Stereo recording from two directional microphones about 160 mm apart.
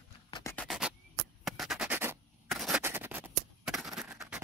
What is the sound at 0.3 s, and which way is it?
Music, 20° left (ahead or behind).